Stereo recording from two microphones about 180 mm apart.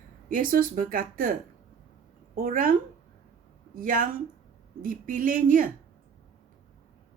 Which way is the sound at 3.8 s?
50° right (ahead or behind).